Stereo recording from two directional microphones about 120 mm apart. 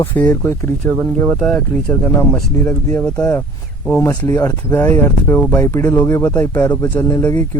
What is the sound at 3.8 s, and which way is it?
Speech, 20° left (ahead or behind).